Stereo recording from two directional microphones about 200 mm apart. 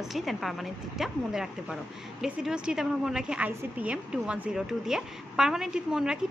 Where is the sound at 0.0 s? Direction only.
Centre (ahead or behind).